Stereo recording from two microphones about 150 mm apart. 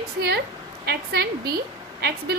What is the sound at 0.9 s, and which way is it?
Speech, 90° right.